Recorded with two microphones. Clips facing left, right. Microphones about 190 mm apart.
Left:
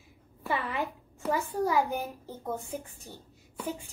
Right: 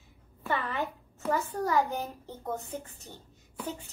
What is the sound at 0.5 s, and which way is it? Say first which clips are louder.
A child's voice: even; 10° left (ahead or behind).